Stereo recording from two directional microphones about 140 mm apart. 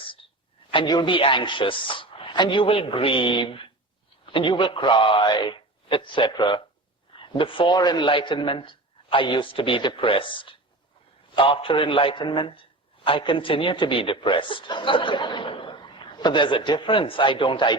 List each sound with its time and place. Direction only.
0.7 s a man's voice: 35° left (ahead or behind)